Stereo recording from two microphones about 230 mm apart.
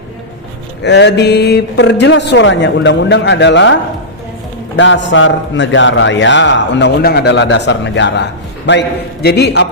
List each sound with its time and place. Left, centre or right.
0.8 s a man's voice: left
4.8 s a man's voice: left